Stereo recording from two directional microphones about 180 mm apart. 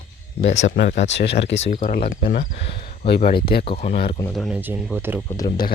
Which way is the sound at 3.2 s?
55° left (ahead or behind).